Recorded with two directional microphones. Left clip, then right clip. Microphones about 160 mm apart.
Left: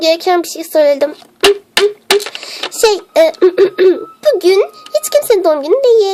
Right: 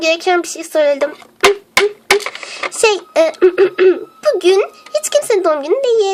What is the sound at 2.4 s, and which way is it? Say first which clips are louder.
A child's voice: left 2 dB; 35° left (ahead or behind).